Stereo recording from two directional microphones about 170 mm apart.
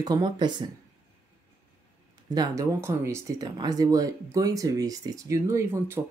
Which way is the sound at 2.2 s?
25° right (ahead or behind).